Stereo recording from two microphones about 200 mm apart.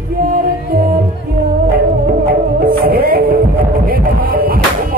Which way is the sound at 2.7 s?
50° right (ahead or behind).